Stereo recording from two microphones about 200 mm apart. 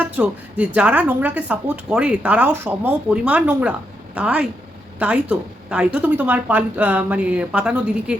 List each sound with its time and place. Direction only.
0.0 s speech: 5° right (ahead or behind)